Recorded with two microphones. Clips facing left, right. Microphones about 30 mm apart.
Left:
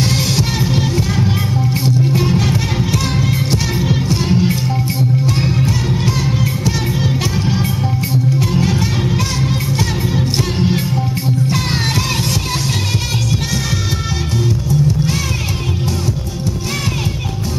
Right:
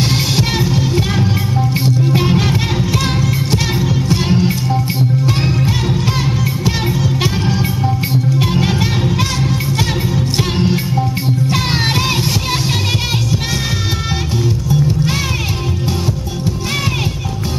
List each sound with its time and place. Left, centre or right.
0.1 s music: centre
4.1 s music: centre
5.9 s music: centre
8.1 s music: right
9.0 s music: centre